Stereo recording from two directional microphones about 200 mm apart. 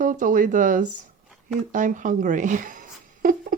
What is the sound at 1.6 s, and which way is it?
A woman's voice, 40° right (ahead or behind).